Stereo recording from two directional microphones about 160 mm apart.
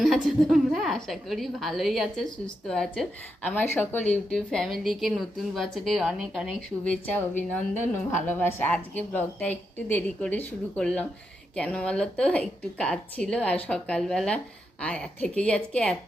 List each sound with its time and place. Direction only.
0.0 s a woman's voice: centre (ahead or behind)
8.1 s a woman's voice: 15° left (ahead or behind)